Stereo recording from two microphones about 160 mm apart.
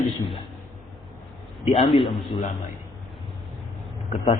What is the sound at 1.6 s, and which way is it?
Speech, 35° left (ahead or behind).